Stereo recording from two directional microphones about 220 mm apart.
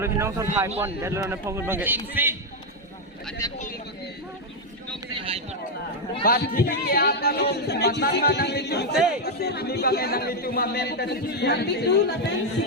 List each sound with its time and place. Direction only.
0.0 s a man's voice: 10° right (ahead or behind)
3.4 s speech: 15° left (ahead or behind)
5.1 s a sound: 25° right (ahead or behind)
6.2 s speech: 40° left (ahead or behind)